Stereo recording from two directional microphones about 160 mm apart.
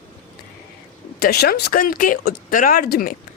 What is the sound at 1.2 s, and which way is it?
A woman's voice, 75° left (ahead or behind).